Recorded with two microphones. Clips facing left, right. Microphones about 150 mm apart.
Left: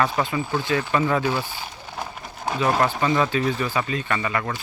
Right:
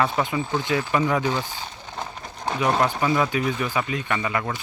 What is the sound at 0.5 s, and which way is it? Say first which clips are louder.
Speech: left 1 dB; 15° right (ahead or behind).